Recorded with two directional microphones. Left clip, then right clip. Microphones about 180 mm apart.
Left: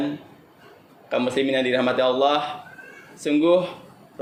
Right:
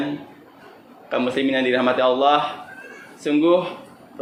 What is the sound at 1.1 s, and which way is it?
A man's voice, 50° left (ahead or behind).